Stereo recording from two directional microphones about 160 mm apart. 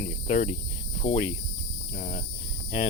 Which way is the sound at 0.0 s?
45° left (ahead or behind).